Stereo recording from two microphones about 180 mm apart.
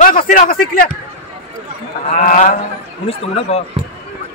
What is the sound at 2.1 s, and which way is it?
Speech, 45° left (ahead or behind).